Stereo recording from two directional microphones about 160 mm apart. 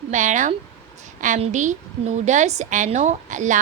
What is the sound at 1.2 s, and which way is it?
A woman's voice, 50° right (ahead or behind).